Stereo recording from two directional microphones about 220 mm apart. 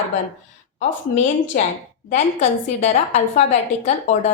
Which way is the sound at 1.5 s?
40° left (ahead or behind).